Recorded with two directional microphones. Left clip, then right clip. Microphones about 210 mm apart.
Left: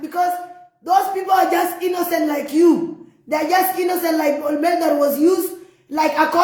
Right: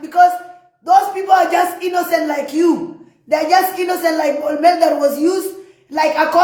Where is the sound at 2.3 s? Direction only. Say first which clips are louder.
Even; 10° left (ahead or behind).